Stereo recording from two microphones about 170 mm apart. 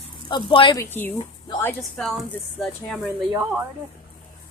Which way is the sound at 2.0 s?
Centre (ahead or behind).